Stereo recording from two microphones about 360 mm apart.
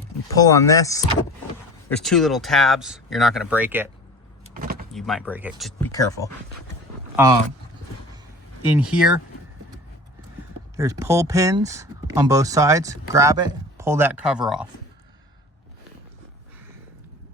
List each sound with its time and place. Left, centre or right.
0.3 s speech: centre
4.4 s vehicle: right
4.9 s speech: centre
8.6 s speech: centre
10.8 s speech: centre